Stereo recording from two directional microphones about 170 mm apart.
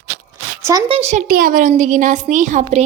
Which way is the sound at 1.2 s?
55° right (ahead or behind).